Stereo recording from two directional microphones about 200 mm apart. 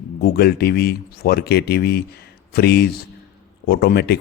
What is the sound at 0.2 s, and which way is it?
Speech, 50° left (ahead or behind).